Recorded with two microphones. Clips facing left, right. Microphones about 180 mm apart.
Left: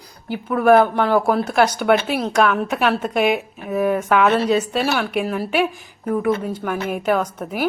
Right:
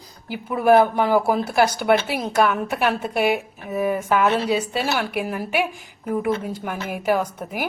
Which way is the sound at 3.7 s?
65° left (ahead or behind).